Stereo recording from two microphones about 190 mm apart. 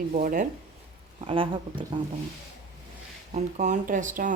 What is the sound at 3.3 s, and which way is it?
Speech, 40° right (ahead or behind).